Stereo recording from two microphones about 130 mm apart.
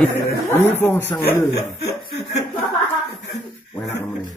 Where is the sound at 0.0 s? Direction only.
15° left (ahead or behind).